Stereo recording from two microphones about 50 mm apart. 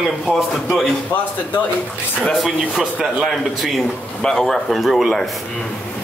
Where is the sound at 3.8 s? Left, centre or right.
Centre.